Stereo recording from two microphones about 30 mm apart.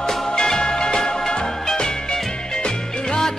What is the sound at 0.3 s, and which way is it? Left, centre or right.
Music, left.